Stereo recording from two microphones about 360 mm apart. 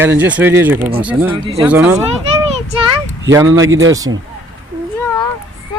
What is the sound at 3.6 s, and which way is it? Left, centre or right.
Speech, right.